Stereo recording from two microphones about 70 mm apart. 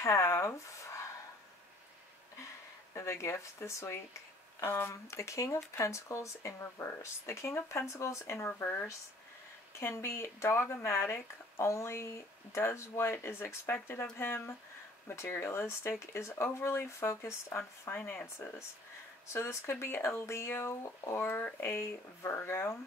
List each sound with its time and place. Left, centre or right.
0.0 s speech: left
2.3 s speech: left
11.5 s speech: left
19.2 s speech: left